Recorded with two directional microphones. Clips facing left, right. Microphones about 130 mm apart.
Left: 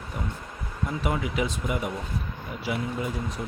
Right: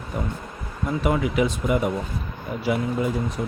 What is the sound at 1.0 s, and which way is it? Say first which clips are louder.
Speech: right 6 dB; 60° right (ahead or behind).